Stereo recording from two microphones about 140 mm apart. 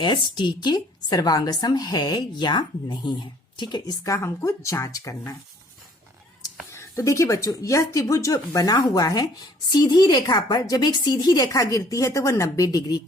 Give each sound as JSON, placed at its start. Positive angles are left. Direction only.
{"t": 0.0, "sound": "a woman's voice", "side_deg": 35}
{"t": 6.7, "sound": "a woman's voice", "side_deg": 20}